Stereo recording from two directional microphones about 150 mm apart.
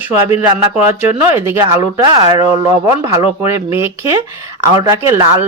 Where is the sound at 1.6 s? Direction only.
30° right (ahead or behind).